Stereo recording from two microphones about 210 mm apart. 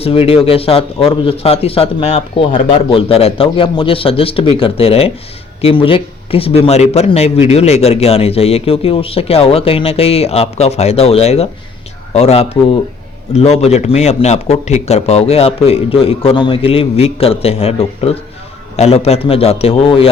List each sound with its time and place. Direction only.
0.0 s a man's voice: 30° left (ahead or behind)